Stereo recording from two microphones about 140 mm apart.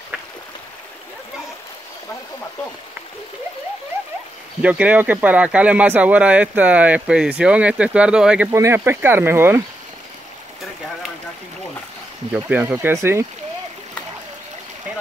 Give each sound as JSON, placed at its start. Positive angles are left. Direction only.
{"t": 4.6, "sound": "speech", "side_deg": -10}
{"t": 8.5, "sound": "speech", "side_deg": -20}
{"t": 12.3, "sound": "speech", "side_deg": -10}